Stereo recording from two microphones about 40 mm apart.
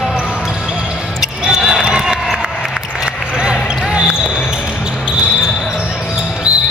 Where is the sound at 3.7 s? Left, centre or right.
Right.